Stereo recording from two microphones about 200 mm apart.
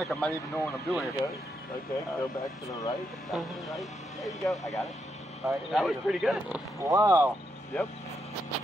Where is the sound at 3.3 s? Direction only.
Centre (ahead or behind).